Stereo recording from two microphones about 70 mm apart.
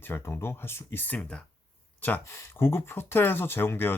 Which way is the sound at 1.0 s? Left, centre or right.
Left.